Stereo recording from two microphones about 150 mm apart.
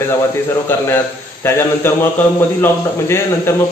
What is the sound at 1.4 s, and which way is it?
A man's voice, 15° left (ahead or behind).